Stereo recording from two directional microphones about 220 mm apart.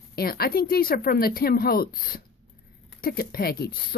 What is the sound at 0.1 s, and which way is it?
Speech, 45° left (ahead or behind).